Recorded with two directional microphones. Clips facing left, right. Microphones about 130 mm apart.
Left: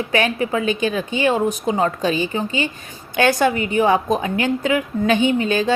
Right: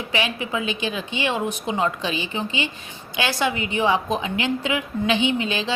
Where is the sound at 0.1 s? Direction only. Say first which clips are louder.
Left 5 dB; 45° left (ahead or behind).